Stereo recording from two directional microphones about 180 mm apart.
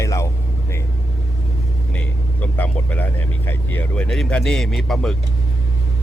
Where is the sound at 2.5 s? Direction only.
10° left (ahead or behind).